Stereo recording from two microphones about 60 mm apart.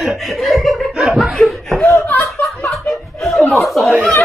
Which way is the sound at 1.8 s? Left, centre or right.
Left.